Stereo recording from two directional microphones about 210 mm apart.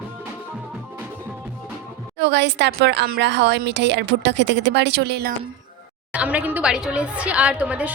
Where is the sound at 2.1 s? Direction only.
55° right (ahead or behind).